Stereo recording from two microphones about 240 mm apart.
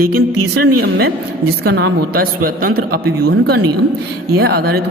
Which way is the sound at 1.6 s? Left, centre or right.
Right.